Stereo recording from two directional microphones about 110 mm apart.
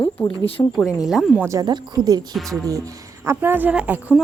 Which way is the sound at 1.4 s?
35° right (ahead or behind).